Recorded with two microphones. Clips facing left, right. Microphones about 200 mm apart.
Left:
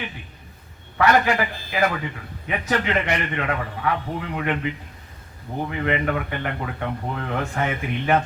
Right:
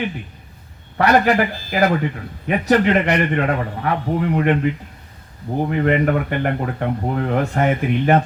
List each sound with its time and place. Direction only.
0.9 s a man's voice: 35° right (ahead or behind)
3.1 s a man's voice: 60° right (ahead or behind)
3.4 s speech: 40° right (ahead or behind)
5.5 s speech: 40° right (ahead or behind)